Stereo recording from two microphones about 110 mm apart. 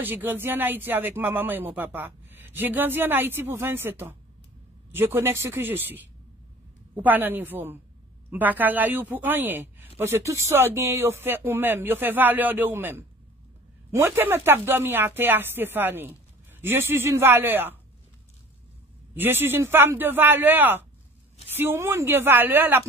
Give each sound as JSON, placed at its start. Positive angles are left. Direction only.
{"t": 0.0, "sound": "speech", "side_deg": -15}
{"t": 19.1, "sound": "speech", "side_deg": -20}